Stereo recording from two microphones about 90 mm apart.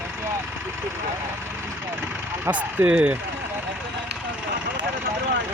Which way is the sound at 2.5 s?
15° right (ahead or behind).